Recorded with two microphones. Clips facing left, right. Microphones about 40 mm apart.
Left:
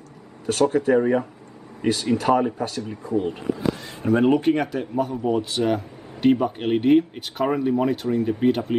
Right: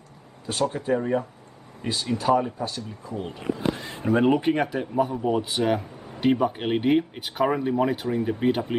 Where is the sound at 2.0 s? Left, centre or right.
Left.